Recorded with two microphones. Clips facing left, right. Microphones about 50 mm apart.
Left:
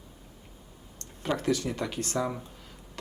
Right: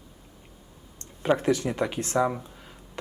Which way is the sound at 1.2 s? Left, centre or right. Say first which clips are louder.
Right 5 dB; right.